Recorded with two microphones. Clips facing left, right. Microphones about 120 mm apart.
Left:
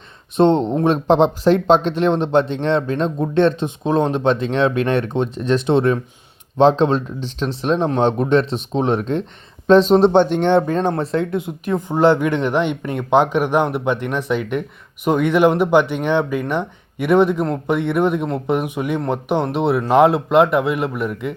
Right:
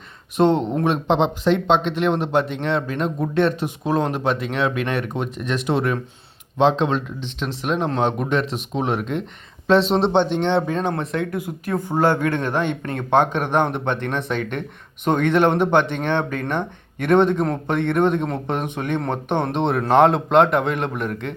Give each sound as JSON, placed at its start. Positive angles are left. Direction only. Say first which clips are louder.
{"t": 0.3, "sound": "speech", "louder": "left 3 dB", "side_deg": 30}
{"t": 2.2, "sound": "speech", "louder": "left 4 dB", "side_deg": 30}
{"t": 10.1, "sound": "speech", "louder": "left 4 dB", "side_deg": 50}